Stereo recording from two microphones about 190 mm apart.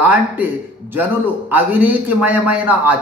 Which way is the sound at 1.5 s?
10° right (ahead or behind).